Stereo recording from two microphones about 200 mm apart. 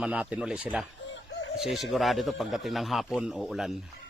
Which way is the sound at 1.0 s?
65° left (ahead or behind).